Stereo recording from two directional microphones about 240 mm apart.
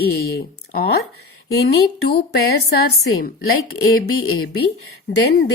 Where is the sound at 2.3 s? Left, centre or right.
Left.